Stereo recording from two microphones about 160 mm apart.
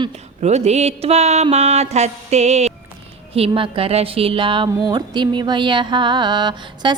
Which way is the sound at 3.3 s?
35° right (ahead or behind).